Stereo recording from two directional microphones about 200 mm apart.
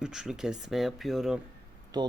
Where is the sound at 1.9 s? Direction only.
20° right (ahead or behind).